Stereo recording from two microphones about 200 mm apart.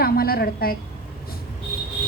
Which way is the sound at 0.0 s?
50° left (ahead or behind).